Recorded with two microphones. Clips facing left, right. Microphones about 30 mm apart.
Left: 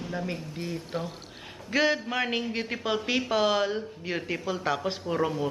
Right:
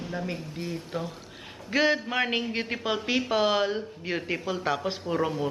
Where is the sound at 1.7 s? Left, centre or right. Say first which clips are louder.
Right 1 dB; centre.